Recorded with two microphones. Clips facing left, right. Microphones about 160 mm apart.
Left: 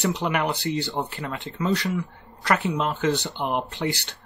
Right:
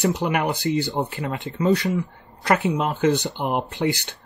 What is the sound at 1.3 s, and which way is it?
Speech, 20° right (ahead or behind).